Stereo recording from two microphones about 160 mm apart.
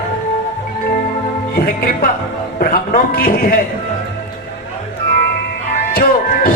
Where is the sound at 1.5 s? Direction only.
65° left (ahead or behind).